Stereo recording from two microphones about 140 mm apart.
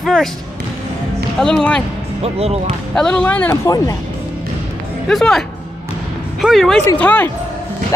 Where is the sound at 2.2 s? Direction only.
45° right (ahead or behind).